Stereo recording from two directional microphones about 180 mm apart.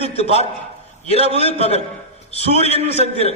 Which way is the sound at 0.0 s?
35° left (ahead or behind).